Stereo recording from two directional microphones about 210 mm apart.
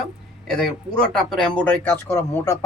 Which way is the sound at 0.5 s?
5° left (ahead or behind).